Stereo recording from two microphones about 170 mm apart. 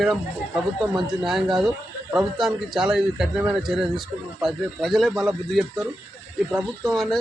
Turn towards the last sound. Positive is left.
turn(degrees=5)  # may be behind; listen again after turning